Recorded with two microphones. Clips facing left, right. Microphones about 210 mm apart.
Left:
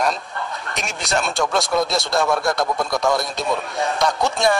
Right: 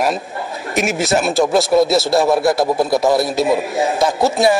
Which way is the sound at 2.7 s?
30° right (ahead or behind).